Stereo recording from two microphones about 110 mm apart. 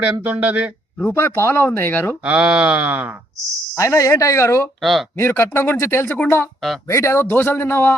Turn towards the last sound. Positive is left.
turn(degrees=20)  # may be behind; listen again after turning